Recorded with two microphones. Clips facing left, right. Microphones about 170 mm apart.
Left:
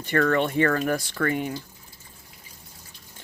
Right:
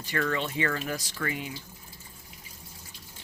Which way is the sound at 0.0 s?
55° left (ahead or behind).